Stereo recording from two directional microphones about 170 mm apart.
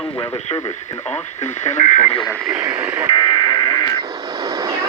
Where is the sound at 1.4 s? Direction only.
45° left (ahead or behind).